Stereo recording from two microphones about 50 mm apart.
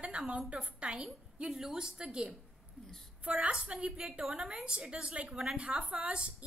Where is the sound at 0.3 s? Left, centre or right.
Right.